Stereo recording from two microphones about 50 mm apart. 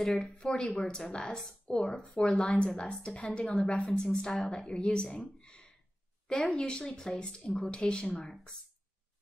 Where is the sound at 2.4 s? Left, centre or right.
Centre.